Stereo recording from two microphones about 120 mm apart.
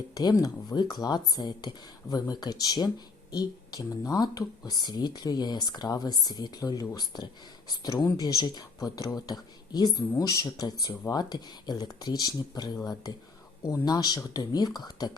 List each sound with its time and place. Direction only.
0.1 s speech: 30° left (ahead or behind)